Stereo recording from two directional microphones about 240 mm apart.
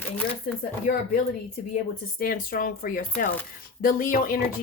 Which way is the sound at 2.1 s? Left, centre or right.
Left.